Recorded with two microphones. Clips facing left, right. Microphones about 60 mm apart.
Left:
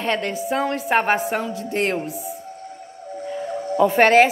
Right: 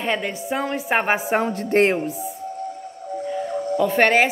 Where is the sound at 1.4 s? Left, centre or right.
Right.